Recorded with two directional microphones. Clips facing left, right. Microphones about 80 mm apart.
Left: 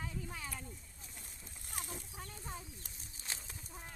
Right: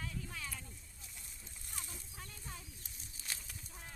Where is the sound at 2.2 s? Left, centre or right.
Left.